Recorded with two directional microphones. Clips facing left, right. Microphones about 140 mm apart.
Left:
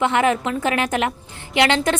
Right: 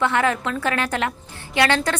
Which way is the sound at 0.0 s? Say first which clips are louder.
Left 2 dB; 20° left (ahead or behind).